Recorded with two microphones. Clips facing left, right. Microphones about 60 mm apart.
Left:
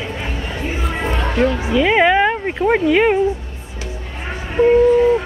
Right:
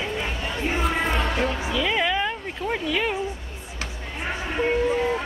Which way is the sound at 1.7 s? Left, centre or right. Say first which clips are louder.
Left 12 dB; left.